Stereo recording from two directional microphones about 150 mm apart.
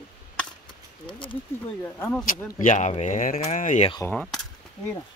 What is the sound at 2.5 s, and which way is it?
Speech, 55° left (ahead or behind).